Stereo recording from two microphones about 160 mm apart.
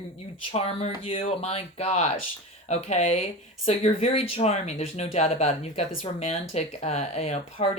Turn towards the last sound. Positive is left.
turn(degrees=40)  # may be behind; listen again after turning